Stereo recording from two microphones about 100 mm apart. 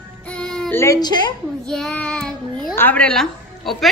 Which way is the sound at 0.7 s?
30° left (ahead or behind).